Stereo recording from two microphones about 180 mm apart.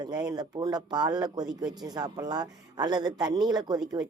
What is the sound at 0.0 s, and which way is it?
A woman's voice, 25° right (ahead or behind).